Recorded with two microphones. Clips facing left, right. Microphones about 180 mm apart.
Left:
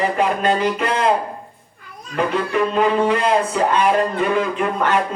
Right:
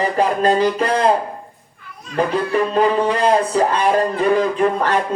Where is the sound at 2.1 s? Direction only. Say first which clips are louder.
Right 2 dB; 35° right (ahead or behind).